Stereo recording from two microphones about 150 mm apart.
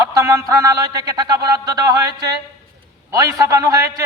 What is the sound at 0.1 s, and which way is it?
A man's voice, 20° right (ahead or behind).